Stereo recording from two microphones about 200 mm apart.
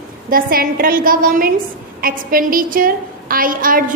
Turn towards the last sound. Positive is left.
turn(degrees=-45)  # may be behind; listen again after turning